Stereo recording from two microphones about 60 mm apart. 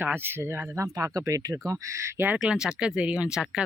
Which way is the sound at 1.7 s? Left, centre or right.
Right.